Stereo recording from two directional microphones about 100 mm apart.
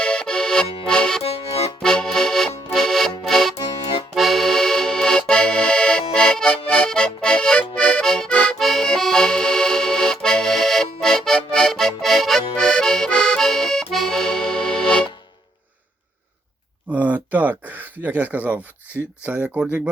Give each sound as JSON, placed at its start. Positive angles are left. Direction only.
{"t": 0.0, "sound": "accordion", "side_deg": 10}
{"t": 1.2, "sound": "accordion", "side_deg": 85}
{"t": 1.8, "sound": "accordion", "side_deg": 5}
{"t": 2.7, "sound": "music", "side_deg": 5}
{"t": 4.1, "sound": "accordion", "side_deg": 0}
{"t": 16.9, "sound": "a sound", "side_deg": -15}
{"t": 19.2, "sound": "speech", "side_deg": -15}